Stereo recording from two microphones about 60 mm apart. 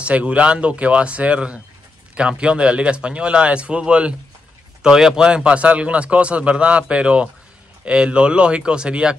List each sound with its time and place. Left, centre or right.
0.0 s speech: right